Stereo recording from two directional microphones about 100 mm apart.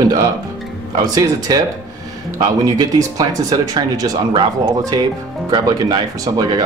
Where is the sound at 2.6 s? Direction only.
40° right (ahead or behind).